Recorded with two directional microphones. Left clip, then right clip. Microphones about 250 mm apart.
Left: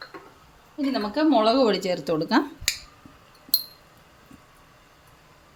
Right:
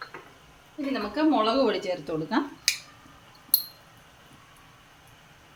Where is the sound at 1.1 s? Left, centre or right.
Left.